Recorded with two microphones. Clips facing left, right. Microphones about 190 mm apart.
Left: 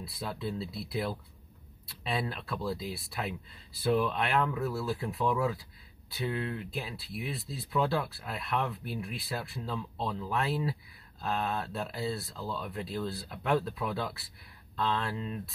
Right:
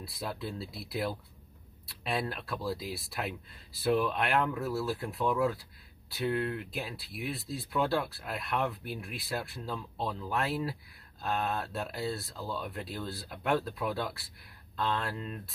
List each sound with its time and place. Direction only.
0.0 s speech: centre (ahead or behind)